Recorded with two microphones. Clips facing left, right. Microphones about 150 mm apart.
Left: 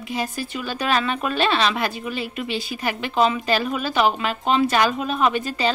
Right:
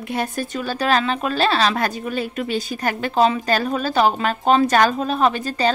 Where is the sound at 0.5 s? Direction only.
40° right (ahead or behind).